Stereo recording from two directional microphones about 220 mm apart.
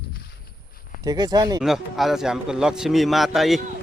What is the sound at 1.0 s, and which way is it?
Speech, 20° right (ahead or behind).